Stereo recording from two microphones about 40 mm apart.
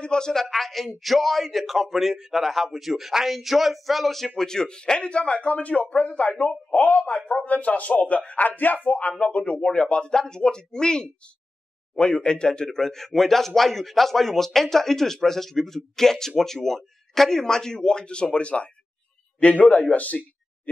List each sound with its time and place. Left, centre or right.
0.0 s a man's voice: centre
4.4 s a man's voice: centre; by 20.2 s left